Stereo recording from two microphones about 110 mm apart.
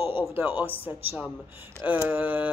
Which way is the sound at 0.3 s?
20° right (ahead or behind).